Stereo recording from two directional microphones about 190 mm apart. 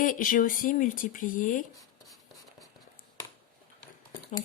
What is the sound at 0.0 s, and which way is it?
Speech, 45° left (ahead or behind).